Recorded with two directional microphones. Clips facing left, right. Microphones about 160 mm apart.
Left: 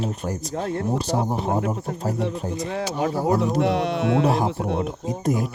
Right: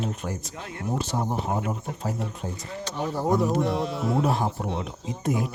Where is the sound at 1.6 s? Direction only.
50° left (ahead or behind).